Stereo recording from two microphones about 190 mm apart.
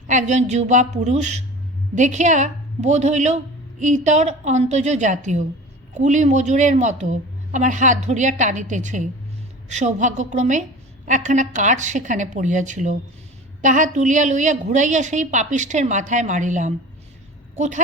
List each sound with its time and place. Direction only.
0.1 s a woman's voice: 40° right (ahead or behind)